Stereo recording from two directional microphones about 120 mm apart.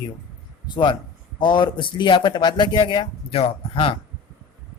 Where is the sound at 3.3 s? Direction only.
50° left (ahead or behind).